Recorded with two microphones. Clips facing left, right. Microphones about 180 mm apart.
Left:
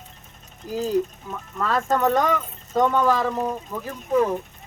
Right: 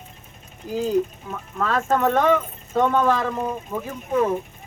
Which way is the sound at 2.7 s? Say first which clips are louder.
Even; 10° left (ahead or behind).